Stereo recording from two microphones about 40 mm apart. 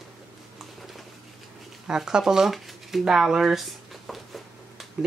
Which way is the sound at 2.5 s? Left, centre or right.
Centre.